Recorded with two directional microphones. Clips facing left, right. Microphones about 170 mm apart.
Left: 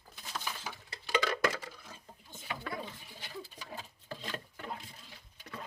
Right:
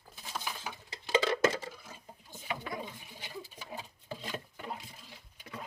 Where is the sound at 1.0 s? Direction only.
25° right (ahead or behind).